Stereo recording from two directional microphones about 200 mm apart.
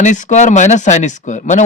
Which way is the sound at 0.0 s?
35° left (ahead or behind).